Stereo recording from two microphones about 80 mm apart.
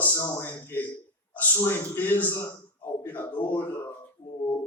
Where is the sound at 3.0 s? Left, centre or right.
Left.